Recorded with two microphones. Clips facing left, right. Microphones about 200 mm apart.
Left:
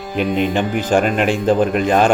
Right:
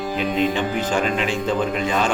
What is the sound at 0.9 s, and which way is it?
Speech, 55° left (ahead or behind).